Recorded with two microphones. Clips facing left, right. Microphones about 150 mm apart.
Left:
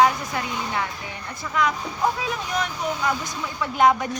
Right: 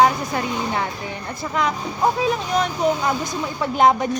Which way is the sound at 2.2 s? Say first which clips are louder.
Right 6 dB; 30° right (ahead or behind).